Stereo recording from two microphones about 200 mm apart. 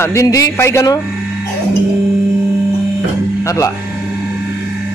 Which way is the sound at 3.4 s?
15° left (ahead or behind).